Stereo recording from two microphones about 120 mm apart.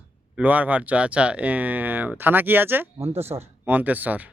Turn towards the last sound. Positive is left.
turn(degrees=-15)  # may be behind; listen again after turning